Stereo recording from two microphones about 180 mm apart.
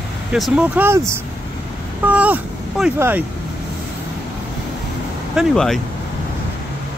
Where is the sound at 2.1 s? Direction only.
5° right (ahead or behind).